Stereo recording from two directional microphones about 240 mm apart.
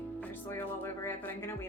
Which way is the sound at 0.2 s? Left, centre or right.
Centre.